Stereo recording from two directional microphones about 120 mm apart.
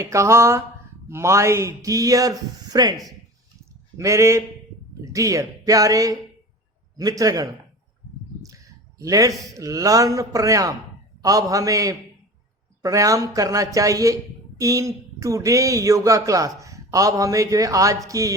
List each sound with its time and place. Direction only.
0.0 s speech: 25° right (ahead or behind)
3.9 s speech: 25° right (ahead or behind)
9.0 s a man's voice: 30° right (ahead or behind)